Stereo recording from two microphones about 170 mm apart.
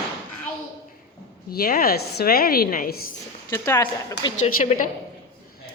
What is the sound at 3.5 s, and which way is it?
Speech, 15° left (ahead or behind).